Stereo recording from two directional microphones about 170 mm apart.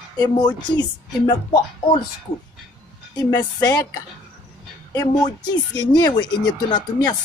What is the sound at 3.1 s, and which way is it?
Speech, 20° left (ahead or behind).